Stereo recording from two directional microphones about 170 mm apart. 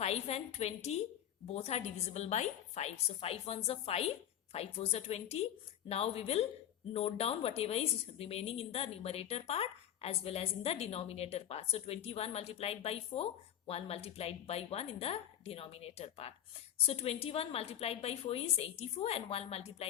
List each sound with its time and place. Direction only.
0.0 s a woman's voice: 35° left (ahead or behind)